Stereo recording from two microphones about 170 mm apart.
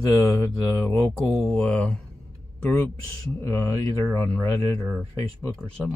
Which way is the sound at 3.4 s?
15° left (ahead or behind).